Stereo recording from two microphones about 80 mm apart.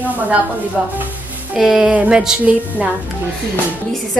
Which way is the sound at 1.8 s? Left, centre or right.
Centre.